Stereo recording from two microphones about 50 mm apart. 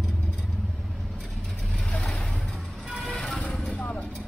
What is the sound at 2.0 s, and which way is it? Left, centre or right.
Vehicle, centre.